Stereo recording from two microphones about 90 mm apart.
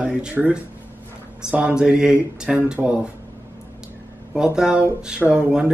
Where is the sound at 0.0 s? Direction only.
10° right (ahead or behind).